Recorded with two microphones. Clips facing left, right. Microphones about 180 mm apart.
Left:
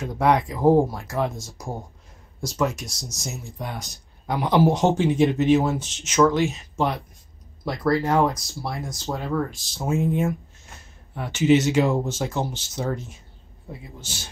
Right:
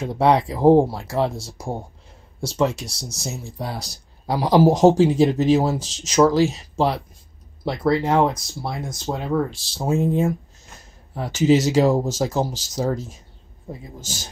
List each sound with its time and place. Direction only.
0.0 s speech: 30° right (ahead or behind)
7.6 s speech: 25° right (ahead or behind)
8.4 s speech: centre (ahead or behind)
8.9 s speech: 20° right (ahead or behind)
9.7 s speech: 35° right (ahead or behind)